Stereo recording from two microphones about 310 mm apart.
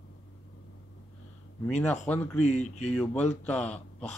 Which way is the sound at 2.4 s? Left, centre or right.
Left.